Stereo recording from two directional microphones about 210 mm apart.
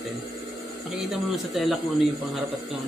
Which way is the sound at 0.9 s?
Centre (ahead or behind).